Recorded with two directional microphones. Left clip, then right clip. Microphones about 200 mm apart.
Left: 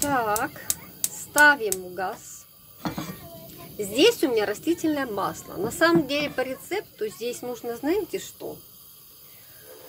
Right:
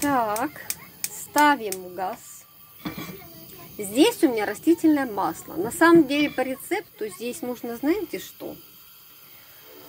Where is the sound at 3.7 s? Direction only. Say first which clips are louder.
Left 1 dB; 5° right (ahead or behind).